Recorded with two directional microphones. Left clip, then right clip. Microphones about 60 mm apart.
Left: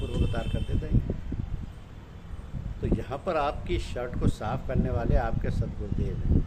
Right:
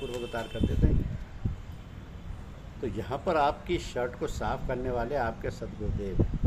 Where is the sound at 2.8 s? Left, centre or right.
Centre.